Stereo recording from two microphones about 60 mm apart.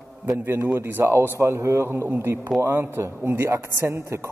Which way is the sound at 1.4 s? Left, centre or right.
Right.